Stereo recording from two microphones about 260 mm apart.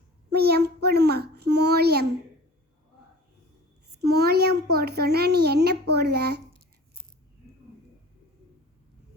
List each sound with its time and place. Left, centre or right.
0.3 s a child's voice: right
4.0 s a child's voice: right